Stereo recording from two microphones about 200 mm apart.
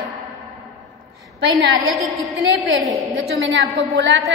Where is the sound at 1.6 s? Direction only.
70° right (ahead or behind).